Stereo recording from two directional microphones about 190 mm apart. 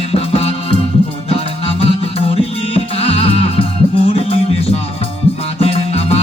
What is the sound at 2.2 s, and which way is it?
Music, 30° left (ahead or behind).